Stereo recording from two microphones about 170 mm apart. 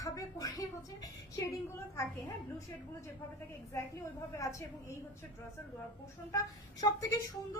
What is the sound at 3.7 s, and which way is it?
A woman's voice, 15° left (ahead or behind).